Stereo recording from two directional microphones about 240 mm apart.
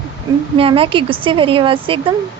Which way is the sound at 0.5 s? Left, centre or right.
Right.